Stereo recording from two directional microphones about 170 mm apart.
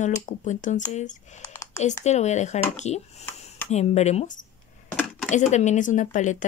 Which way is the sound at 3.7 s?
40° left (ahead or behind).